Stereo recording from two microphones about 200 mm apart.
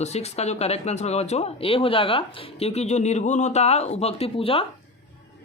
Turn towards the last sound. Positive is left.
turn(degrees=30)  # may be behind; listen again after turning